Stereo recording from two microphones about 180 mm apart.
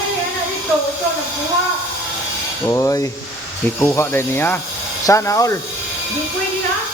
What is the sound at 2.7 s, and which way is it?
Speech, 20° left (ahead or behind).